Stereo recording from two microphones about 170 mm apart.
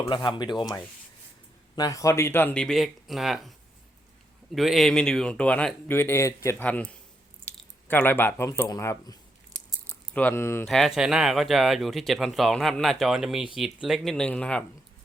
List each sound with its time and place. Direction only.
0.0 s speech: 25° left (ahead or behind); by 3.5 s centre (ahead or behind)
4.5 s speech: centre (ahead or behind); by 9.1 s 20° left (ahead or behind)
9.5 s a sound: 5° left (ahead or behind)
9.9 s speech: 10° left (ahead or behind)
10.7 s speech: centre (ahead or behind)